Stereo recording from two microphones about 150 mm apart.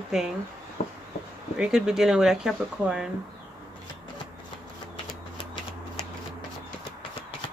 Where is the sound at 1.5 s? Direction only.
5° right (ahead or behind).